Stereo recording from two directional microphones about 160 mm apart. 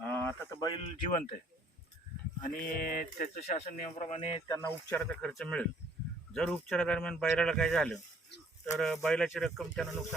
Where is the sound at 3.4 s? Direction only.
50° left (ahead or behind).